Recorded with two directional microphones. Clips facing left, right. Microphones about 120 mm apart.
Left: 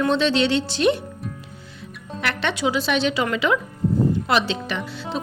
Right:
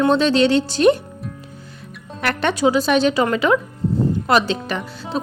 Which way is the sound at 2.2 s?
45° right (ahead or behind).